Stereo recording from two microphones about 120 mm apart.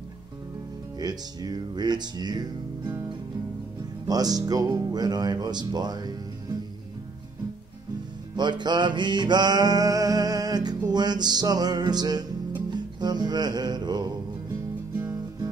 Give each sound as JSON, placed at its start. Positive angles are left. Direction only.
{"t": 0.9, "sound": "music", "side_deg": -35}
{"t": 4.1, "sound": "speech", "side_deg": -30}
{"t": 8.4, "sound": "music", "side_deg": -40}